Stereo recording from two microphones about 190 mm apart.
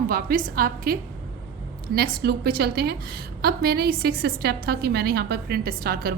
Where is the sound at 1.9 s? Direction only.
55° right (ahead or behind).